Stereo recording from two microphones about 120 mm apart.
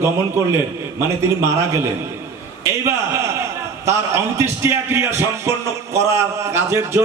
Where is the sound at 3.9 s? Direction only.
20° right (ahead or behind).